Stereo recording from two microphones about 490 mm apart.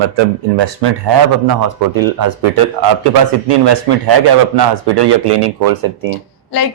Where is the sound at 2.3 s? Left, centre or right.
Right.